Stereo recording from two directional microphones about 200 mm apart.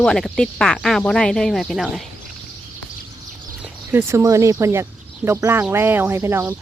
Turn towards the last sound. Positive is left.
turn(degrees=-10)  # may be behind; listen again after turning